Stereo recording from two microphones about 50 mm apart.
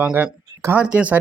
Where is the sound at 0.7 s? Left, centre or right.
Right.